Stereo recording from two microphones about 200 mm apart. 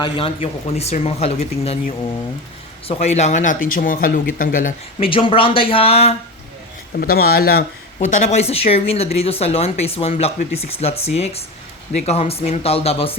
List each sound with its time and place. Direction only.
0.0 s speech: 25° left (ahead or behind)
2.8 s speech: 30° left (ahead or behind)
4.9 s speech: 25° left (ahead or behind)
7.0 s speech: 50° left (ahead or behind)
7.9 s speech: 35° left (ahead or behind)